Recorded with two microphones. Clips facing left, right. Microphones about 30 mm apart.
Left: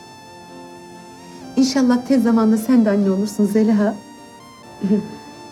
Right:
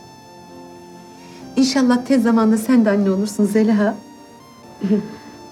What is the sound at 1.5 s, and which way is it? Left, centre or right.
A woman's voice, centre.